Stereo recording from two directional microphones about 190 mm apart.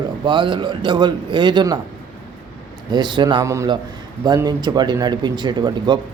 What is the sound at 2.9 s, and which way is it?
A man's voice, 25° right (ahead or behind).